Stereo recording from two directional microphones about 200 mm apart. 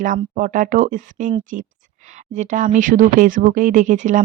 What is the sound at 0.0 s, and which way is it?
Speech, 40° right (ahead or behind).